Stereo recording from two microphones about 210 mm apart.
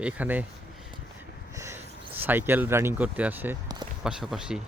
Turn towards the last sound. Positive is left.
turn(degrees=-5)  # may be behind; listen again after turning